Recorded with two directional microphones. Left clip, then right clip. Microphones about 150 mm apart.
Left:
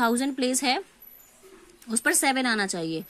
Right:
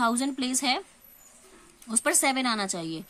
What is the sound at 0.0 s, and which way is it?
Speech, 15° left (ahead or behind).